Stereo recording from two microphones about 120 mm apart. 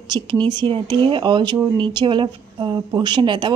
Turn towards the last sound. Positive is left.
turn(degrees=-40)  # may be behind; listen again after turning